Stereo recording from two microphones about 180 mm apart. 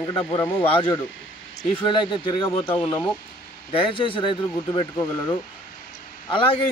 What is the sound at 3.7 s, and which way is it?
Speech, 30° left (ahead or behind).